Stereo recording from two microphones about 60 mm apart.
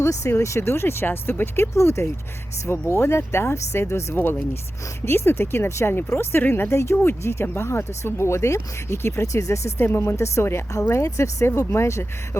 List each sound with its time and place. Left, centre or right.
0.0 s speech: left
9.7 s speech: left